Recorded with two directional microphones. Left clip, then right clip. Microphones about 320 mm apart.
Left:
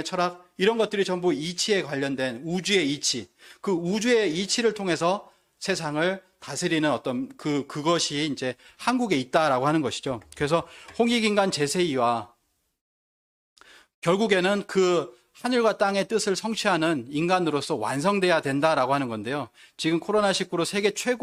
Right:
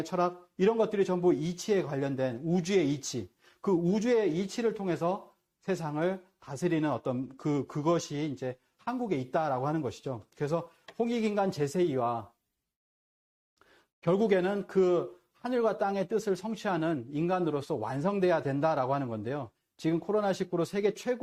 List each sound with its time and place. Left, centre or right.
0.0 s speech: left
13.6 s speech: left